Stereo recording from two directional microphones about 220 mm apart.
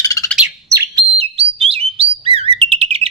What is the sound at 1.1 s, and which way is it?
Bird, 25° right (ahead or behind).